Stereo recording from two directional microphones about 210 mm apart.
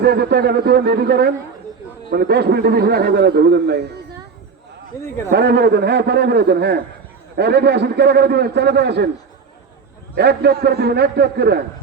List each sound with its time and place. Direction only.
0.0 s a man's voice: 50° right (ahead or behind)
4.9 s speech: 15° left (ahead or behind)
5.3 s a man's voice: 50° right (ahead or behind)
10.2 s a man's voice: 50° right (ahead or behind)